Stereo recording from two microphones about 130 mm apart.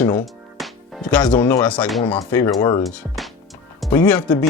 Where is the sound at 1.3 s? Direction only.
15° left (ahead or behind).